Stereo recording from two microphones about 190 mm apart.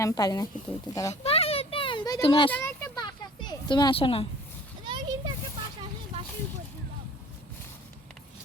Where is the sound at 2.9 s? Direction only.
25° left (ahead or behind).